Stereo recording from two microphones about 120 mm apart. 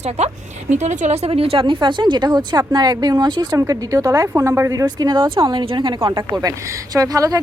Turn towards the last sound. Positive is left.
turn(degrees=-30)  # may be behind; listen again after turning